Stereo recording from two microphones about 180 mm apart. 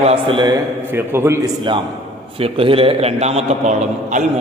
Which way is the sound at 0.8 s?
10° right (ahead or behind).